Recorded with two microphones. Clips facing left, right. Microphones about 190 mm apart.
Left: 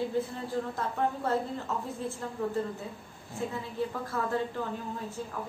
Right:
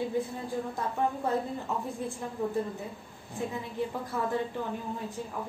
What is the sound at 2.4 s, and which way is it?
Speech, 15° right (ahead or behind).